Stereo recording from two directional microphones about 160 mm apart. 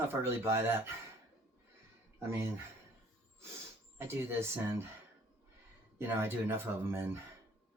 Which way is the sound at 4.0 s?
15° right (ahead or behind).